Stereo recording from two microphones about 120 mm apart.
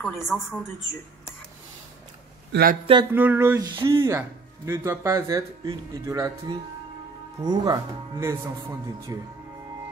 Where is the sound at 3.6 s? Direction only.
30° right (ahead or behind).